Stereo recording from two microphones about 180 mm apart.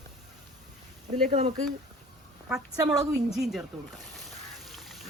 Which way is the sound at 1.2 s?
50° right (ahead or behind).